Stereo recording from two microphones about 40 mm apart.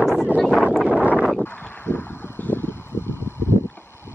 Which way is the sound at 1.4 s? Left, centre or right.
Left.